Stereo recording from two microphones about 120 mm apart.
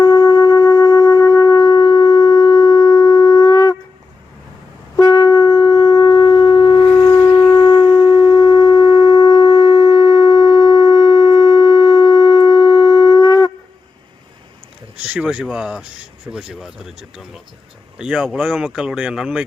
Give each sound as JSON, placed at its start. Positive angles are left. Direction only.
{"t": 0.0, "sound": "wind instrument", "side_deg": 30}
{"t": 4.9, "sound": "shofar", "side_deg": 30}
{"t": 7.2, "sound": "shofar", "side_deg": 25}
{"t": 15.0, "sound": "a sound", "side_deg": -10}
{"t": 15.5, "sound": "speech", "side_deg": -10}